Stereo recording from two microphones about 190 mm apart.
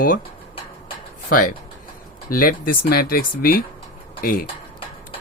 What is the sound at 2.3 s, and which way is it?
Speech, 50° left (ahead or behind).